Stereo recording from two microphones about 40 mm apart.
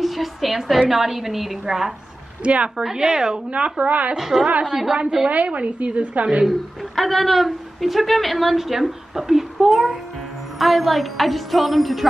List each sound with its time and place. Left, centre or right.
0.0 s speech: centre
2.4 s a woman's voice: right
2.8 s a woman's voice: centre
3.4 s a woman's voice: right
4.2 s a woman's voice: centre
5.3 s a woman's voice: right
6.4 s speech: centre